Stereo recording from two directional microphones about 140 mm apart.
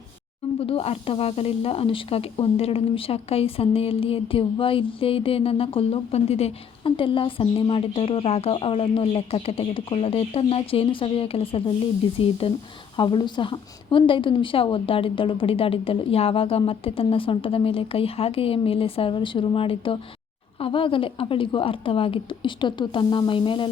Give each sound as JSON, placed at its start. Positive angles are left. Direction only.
{"t": 0.6, "sound": "speech", "side_deg": 45}